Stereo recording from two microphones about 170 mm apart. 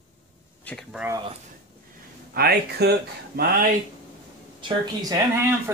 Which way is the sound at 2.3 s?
70° right (ahead or behind).